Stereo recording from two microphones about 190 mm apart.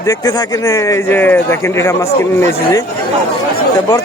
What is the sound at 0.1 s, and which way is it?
A man's voice, 20° left (ahead or behind).